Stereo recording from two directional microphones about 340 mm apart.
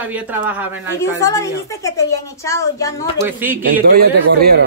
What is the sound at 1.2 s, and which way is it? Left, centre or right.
Speech, centre.